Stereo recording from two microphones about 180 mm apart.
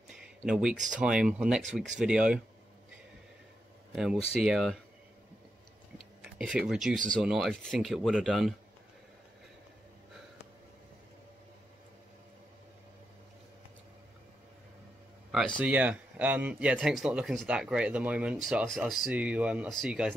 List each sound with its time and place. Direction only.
0.5 s speech: 5° right (ahead or behind)
0.7 s speech: 45° right (ahead or behind)
1.0 s speech: 5° right (ahead or behind)
3.9 s speech: centre (ahead or behind)
6.3 s speech: 5° right (ahead or behind)
15.6 s speech: 10° right (ahead or behind)